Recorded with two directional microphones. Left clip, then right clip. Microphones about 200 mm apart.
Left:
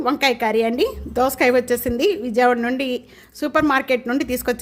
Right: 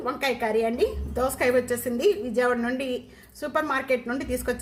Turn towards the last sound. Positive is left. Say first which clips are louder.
# left 7 dB
turn(degrees=50)  # may be behind; listen again after turning